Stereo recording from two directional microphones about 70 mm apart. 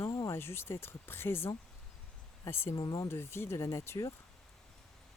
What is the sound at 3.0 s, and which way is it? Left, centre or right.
Speech, left.